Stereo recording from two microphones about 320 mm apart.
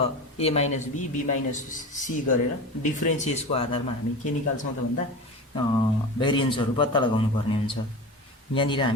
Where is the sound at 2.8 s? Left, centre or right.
Left.